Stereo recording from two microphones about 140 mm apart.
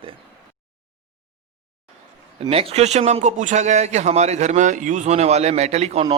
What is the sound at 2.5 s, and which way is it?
A man's voice, 45° right (ahead or behind).